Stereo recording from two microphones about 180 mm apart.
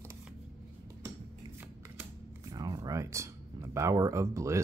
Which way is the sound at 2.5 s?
20° right (ahead or behind).